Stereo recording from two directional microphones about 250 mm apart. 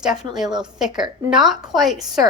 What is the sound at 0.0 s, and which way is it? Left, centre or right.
Speech, centre.